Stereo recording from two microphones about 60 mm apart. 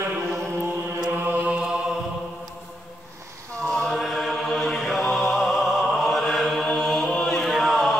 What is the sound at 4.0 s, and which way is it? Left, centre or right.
Music, centre.